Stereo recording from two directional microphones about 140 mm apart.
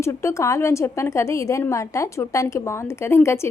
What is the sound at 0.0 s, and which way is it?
A woman's voice, 20° left (ahead or behind).